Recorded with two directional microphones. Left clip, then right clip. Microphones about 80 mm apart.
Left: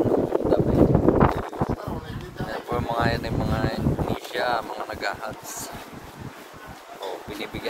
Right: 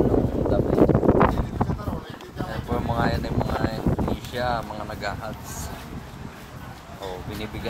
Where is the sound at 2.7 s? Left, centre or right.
Left.